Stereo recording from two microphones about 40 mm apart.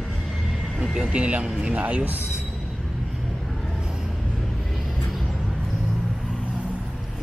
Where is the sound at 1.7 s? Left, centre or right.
Right.